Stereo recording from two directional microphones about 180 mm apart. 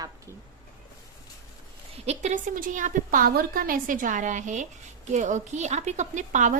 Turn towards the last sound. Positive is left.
turn(degrees=-45)  # may be behind; listen again after turning